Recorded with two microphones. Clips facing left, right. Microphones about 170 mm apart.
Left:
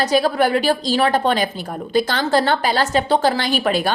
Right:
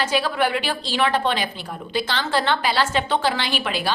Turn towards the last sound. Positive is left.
turn(degrees=45)  # may be behind; listen again after turning